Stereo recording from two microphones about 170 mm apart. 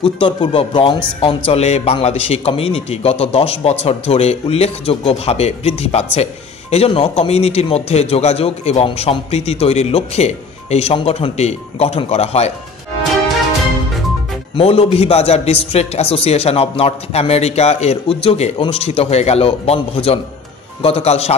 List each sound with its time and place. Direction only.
0.0 s a man's voice: 30° left (ahead or behind)
14.5 s a man's voice: 35° left (ahead or behind)